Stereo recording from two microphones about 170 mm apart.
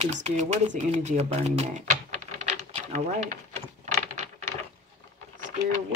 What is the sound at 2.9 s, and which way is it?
Speech, 40° right (ahead or behind).